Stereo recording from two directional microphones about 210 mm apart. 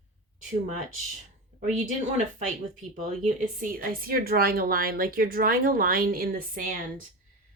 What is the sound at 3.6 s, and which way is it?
A woman's voice, 40° right (ahead or behind).